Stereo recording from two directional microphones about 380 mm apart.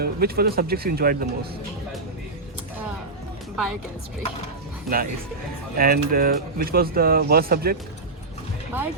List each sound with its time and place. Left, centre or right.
0.0 s speech: right
3.5 s a woman's voice: centre
4.9 s speech: centre
5.7 s speech: right